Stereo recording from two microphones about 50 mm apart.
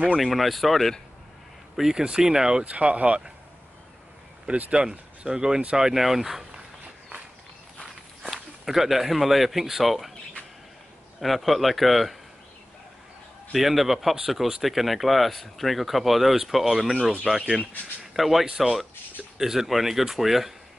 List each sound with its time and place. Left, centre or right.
0.1 s speech: centre
1.8 s speech: centre
2.6 s speech: right
4.5 s speech: right; by 6.4 s centre
8.3 s speech: centre
11.1 s speech: centre
13.5 s speech: centre